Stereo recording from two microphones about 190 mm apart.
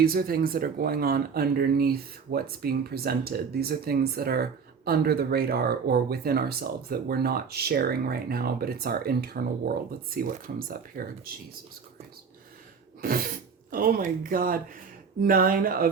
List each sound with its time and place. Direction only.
0.0 s speech: 50° right (ahead or behind)
13.0 s speech: 50° right (ahead or behind)